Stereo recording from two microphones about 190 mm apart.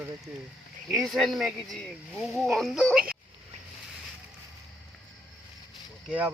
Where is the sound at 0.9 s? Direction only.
Centre (ahead or behind).